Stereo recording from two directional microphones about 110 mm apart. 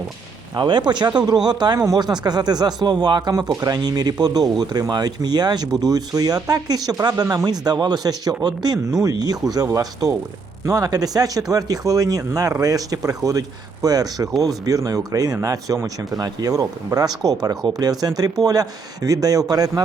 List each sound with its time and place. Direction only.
0.5 s speech: 45° right (ahead or behind)